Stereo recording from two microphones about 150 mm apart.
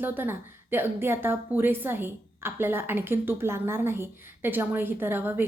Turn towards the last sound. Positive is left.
turn(degrees=-15)  # may be behind; listen again after turning